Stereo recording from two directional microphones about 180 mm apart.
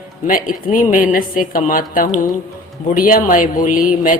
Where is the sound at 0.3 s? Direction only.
50° left (ahead or behind).